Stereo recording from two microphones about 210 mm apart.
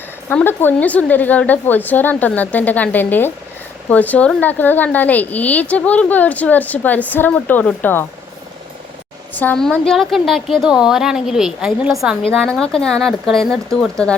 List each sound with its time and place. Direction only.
0.3 s a woman's voice: 10° left (ahead or behind)
9.3 s a woman's voice: 10° left (ahead or behind)